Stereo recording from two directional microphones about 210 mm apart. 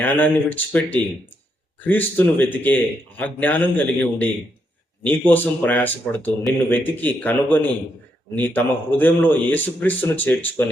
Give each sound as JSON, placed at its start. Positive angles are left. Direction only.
{"t": 0.0, "sound": "speech", "side_deg": 10}
{"t": 5.3, "sound": "speech", "side_deg": 10}